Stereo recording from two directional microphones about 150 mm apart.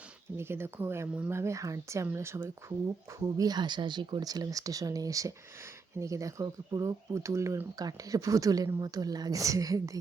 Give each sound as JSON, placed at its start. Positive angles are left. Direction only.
{"t": 0.3, "sound": "speech", "side_deg": -15}